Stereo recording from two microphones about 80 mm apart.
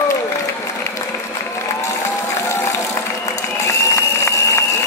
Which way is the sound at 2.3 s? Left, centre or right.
Left.